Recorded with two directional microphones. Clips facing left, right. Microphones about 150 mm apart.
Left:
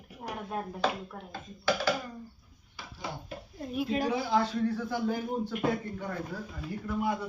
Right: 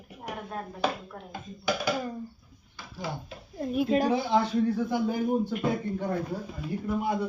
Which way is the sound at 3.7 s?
50° right (ahead or behind).